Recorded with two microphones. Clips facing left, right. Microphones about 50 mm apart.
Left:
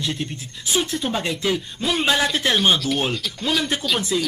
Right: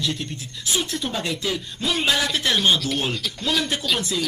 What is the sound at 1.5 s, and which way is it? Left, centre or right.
Speech, centre.